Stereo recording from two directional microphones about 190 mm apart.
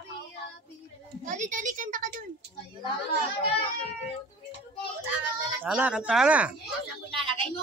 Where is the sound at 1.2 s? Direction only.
40° right (ahead or behind).